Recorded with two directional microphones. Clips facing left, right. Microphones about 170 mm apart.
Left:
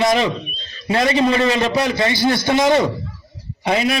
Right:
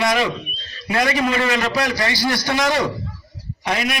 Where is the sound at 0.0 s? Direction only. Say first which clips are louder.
Left 3 dB; 25° left (ahead or behind).